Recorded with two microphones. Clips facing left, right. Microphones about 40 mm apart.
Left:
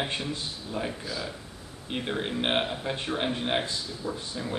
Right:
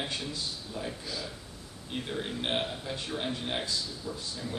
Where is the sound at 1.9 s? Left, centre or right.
Left.